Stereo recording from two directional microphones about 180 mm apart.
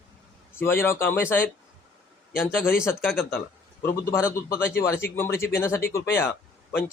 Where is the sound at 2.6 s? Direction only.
15° left (ahead or behind).